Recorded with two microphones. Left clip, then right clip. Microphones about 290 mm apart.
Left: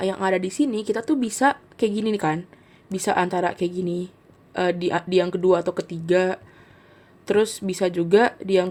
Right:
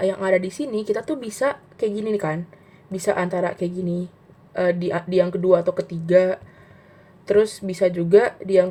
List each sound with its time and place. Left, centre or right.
0.0 s speech: left